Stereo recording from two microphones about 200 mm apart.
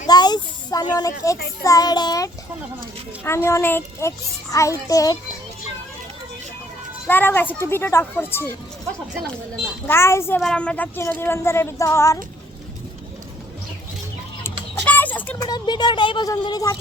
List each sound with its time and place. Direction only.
0.1 s a sound: 20° left (ahead or behind)
1.6 s speech: 20° left (ahead or behind)
7.1 s speech: 10° left (ahead or behind)
9.8 s speech: 10° left (ahead or behind)
14.4 s a sound: 10° left (ahead or behind)
15.4 s speech: 20° left (ahead or behind)